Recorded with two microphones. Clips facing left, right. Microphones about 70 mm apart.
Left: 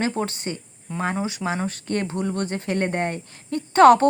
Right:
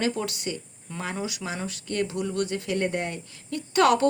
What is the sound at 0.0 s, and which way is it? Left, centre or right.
Speech, left.